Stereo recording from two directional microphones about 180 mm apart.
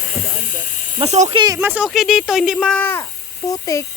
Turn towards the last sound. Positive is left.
turn(degrees=20)  # may be behind; listen again after turning